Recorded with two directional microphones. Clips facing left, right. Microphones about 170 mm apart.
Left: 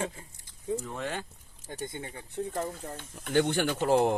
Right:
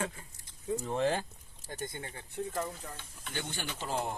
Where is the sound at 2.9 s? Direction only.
55° left (ahead or behind); by 4.1 s 70° left (ahead or behind).